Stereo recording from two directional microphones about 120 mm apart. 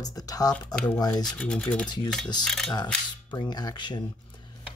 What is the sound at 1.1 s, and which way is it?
Speech, 5° left (ahead or behind).